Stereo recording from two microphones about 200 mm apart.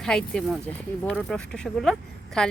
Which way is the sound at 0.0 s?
5° left (ahead or behind).